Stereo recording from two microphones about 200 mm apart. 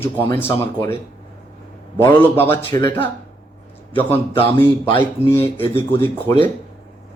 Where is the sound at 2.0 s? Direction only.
10° left (ahead or behind).